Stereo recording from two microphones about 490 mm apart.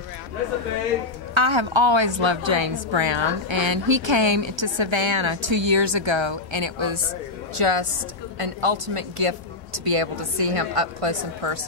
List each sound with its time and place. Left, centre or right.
1.3 s a woman's voice: right
7.5 s a woman's voice: right